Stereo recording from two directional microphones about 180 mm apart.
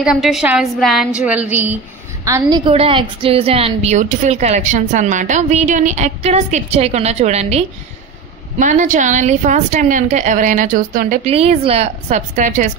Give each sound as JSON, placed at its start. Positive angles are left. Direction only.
{"t": 0.0, "sound": "a woman's voice", "side_deg": 0}
{"t": 2.7, "sound": "a woman's voice", "side_deg": -30}
{"t": 11.2, "sound": "a woman's voice", "side_deg": -35}